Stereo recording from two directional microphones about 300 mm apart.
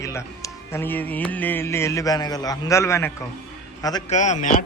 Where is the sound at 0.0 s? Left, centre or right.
Centre.